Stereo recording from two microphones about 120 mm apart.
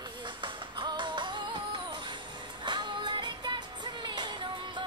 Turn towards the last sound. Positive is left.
turn(degrees=-40)  # may be behind; listen again after turning